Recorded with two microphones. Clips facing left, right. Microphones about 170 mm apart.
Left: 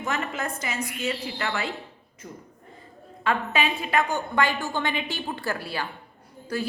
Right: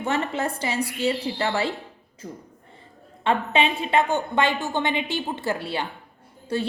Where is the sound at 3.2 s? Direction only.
25° right (ahead or behind).